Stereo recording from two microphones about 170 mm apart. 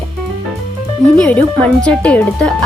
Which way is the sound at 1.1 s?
5° left (ahead or behind).